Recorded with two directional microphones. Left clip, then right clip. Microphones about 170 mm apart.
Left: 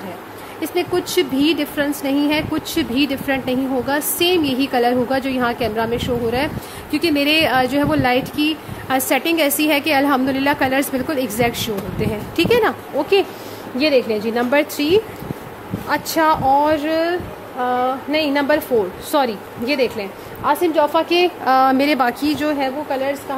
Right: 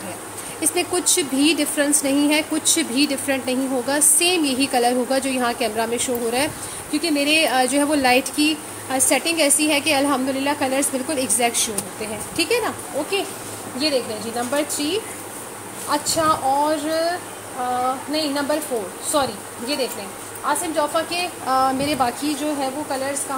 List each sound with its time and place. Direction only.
0.6 s a woman's voice: 15° left (ahead or behind)
6.9 s speech: 35° left (ahead or behind); by 8.5 s 15° left (ahead or behind)
8.8 s a woman's voice: 30° left (ahead or behind)
11.1 s speech: 20° left (ahead or behind); by 12.7 s 35° left (ahead or behind)
13.7 s a woman's voice: 65° left (ahead or behind)
18.1 s a woman's voice: 55° left (ahead or behind)